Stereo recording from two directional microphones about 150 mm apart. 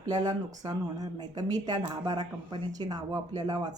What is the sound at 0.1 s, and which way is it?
Speech, 25° right (ahead or behind).